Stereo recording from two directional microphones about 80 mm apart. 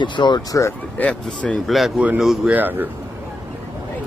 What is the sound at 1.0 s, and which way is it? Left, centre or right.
Speech, centre.